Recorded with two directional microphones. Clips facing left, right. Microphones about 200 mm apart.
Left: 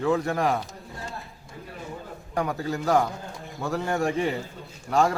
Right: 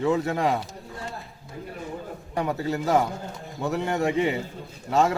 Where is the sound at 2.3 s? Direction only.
Centre (ahead or behind).